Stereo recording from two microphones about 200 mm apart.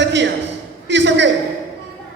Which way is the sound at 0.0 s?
65° right (ahead or behind).